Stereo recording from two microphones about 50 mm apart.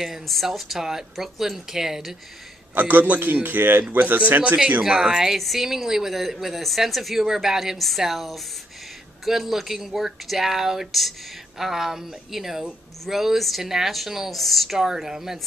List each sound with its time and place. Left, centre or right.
0.0 s speech: centre
2.7 s a man's voice: right
4.8 s speech: centre